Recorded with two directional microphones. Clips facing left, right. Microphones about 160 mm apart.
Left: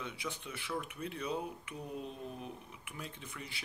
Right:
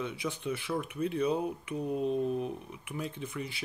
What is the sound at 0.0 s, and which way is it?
Speech, 25° right (ahead or behind).